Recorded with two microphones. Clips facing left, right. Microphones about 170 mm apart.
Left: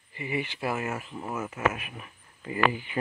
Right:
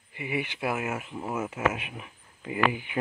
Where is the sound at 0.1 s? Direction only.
10° right (ahead or behind).